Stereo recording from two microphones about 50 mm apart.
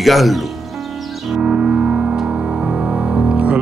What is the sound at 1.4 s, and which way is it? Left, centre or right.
Music, centre.